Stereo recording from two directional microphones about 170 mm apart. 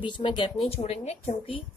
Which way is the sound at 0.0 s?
30° left (ahead or behind).